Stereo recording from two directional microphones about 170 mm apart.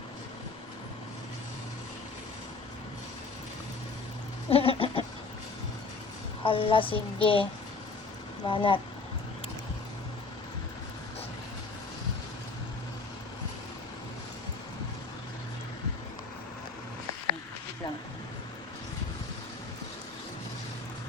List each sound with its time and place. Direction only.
4.4 s goat: 35° left (ahead or behind)
6.4 s speech: 30° left (ahead or behind)
8.4 s speech: 30° left (ahead or behind)